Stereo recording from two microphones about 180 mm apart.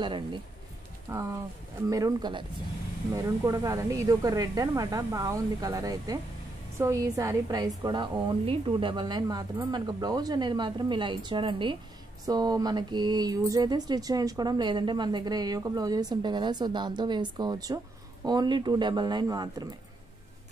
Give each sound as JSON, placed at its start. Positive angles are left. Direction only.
{"t": 0.0, "sound": "speech", "side_deg": -25}
{"t": 1.1, "sound": "speech", "side_deg": -15}